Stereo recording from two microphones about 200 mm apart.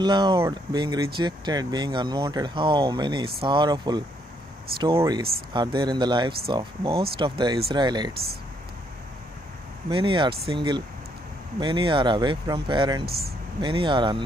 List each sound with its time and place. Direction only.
0.0 s speech: 20° right (ahead or behind)
9.8 s speech: 25° right (ahead or behind)
13.0 s speech: 50° right (ahead or behind)
13.6 s speech: 25° right (ahead or behind)